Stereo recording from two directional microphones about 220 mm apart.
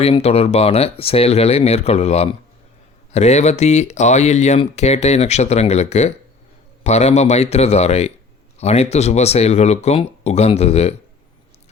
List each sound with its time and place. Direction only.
0.0 s speech: 30° left (ahead or behind)